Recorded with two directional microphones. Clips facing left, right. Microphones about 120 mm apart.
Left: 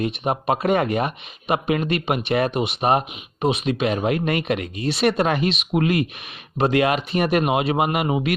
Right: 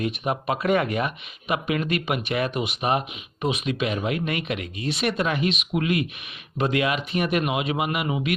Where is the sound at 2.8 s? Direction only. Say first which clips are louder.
Left 5 dB; 40° left (ahead or behind).